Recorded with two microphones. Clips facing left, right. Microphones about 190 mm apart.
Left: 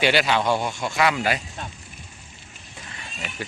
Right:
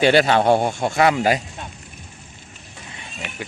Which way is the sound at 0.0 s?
45° right (ahead or behind).